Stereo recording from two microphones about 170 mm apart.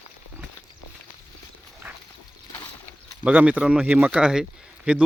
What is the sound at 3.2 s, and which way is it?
Speech, 10° right (ahead or behind).